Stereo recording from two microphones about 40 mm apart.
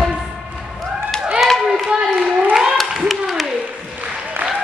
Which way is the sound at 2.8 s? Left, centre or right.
Centre.